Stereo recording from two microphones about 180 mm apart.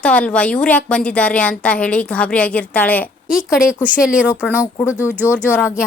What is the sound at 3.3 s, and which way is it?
A woman's voice, 5° right (ahead or behind).